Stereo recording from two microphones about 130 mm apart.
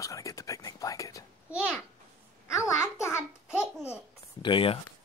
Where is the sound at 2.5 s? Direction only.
25° left (ahead or behind).